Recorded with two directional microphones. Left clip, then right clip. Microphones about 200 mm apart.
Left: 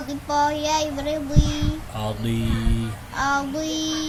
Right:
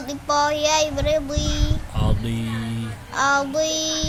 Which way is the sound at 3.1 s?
55° right (ahead or behind).